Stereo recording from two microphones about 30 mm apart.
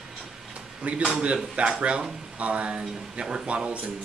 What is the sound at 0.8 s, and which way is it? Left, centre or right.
Speech, right.